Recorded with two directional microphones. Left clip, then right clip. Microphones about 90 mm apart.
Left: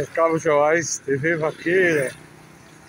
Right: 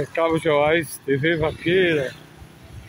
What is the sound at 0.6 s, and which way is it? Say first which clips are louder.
Speech: left 1 dB; 65° right (ahead or behind).